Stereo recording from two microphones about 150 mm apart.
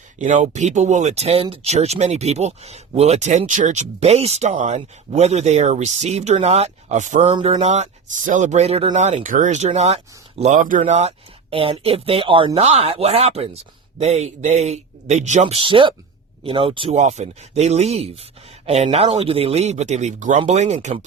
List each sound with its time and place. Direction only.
0.2 s speech: 55° right (ahead or behind)
10.6 s speech: 60° right (ahead or behind)
11.5 s speech: 40° right (ahead or behind)
17.0 s speech: 50° right (ahead or behind)